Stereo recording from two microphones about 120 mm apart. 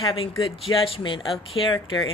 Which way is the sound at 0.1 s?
45° left (ahead or behind).